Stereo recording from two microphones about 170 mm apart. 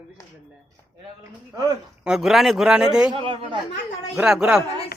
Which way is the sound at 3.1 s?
30° right (ahead or behind).